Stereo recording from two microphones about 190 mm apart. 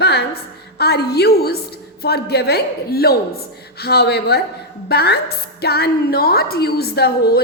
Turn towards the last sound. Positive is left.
turn(degrees=55)  # may be behind; listen again after turning